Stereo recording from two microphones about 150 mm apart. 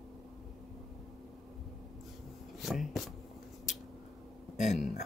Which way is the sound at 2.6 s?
Centre (ahead or behind).